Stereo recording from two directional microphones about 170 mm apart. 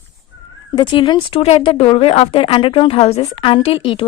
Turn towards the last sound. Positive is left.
turn(degrees=30)  # may be behind; listen again after turning